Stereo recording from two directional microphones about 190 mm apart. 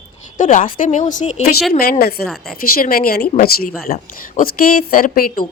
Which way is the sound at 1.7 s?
50° left (ahead or behind).